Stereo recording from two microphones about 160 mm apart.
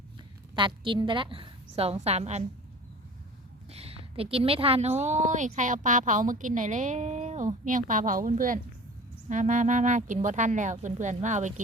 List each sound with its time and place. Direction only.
0.5 s a woman's voice: 30° right (ahead or behind)
3.7 s a woman's voice: 40° right (ahead or behind)